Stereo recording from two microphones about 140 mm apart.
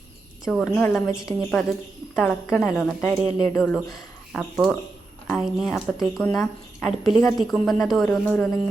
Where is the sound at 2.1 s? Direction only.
15° left (ahead or behind).